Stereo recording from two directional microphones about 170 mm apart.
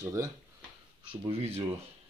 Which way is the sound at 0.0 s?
20° right (ahead or behind).